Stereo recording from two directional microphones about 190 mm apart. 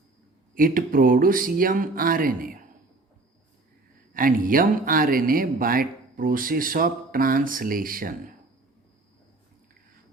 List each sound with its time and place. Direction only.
0.5 s speech: 45° right (ahead or behind)
4.1 s speech: 45° right (ahead or behind)